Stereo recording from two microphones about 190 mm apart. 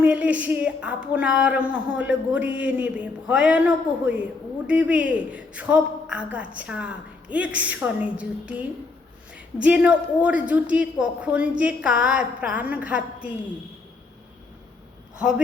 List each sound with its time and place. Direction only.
0.0 s a woman's voice: 5° right (ahead or behind)